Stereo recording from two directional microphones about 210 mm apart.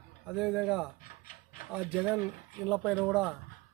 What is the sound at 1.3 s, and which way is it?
Rub, 40° left (ahead or behind).